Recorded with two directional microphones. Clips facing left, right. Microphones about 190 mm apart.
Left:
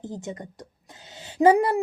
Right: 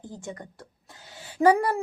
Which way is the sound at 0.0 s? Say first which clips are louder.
Left 4 dB; 20° left (ahead or behind).